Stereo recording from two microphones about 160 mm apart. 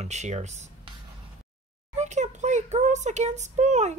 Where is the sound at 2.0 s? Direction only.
45° right (ahead or behind).